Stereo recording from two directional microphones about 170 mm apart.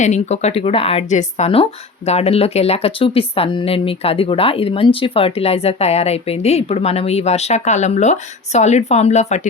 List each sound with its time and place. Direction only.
0.0 s speech: 40° left (ahead or behind)